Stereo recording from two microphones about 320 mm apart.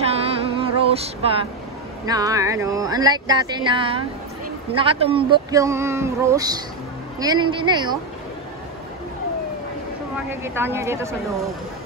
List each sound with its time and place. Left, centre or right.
0.0 s music: centre
2.0 s speech: centre
10.3 s speech: centre